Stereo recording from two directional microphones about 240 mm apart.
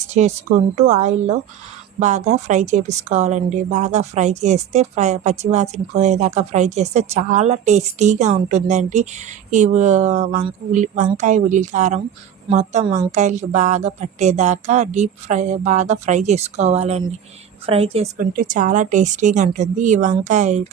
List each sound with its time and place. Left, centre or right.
0.1 s a woman's voice: right